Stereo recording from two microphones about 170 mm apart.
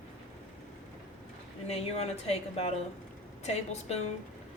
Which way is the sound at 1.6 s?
35° left (ahead or behind).